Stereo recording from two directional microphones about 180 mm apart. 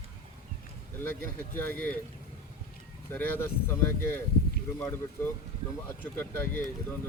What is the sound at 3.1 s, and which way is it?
Speech, 10° left (ahead or behind).